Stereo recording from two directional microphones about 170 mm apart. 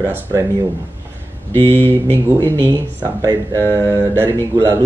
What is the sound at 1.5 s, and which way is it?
Speech, 15° right (ahead or behind).